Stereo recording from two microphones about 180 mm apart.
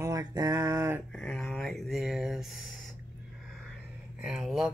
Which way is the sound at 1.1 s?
5° left (ahead or behind).